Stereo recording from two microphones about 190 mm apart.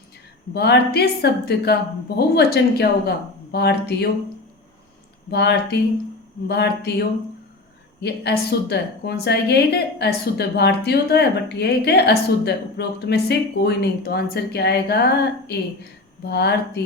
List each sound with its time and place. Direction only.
0.5 s a woman's voice: 60° left (ahead or behind)
5.3 s a woman's voice: 60° left (ahead or behind)
16.2 s a woman's voice: 60° left (ahead or behind)